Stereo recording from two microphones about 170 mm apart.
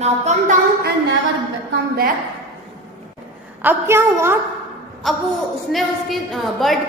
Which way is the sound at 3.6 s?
15° right (ahead or behind).